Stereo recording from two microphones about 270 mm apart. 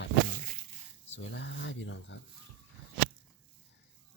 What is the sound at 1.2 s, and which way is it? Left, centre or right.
Speech, left.